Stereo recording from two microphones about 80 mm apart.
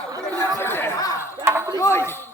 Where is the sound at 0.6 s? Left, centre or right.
Left.